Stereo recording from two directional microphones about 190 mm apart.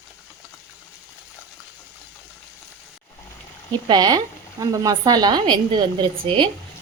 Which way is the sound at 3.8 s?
20° right (ahead or behind).